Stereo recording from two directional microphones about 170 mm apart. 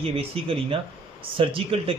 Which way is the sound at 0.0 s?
35° right (ahead or behind).